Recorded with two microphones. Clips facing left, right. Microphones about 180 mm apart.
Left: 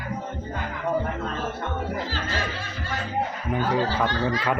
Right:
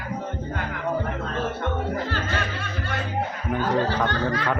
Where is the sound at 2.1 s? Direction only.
60° right (ahead or behind).